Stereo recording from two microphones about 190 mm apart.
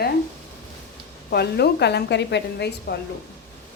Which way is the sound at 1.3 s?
60° left (ahead or behind).